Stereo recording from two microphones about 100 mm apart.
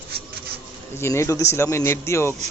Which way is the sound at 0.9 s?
25° left (ahead or behind).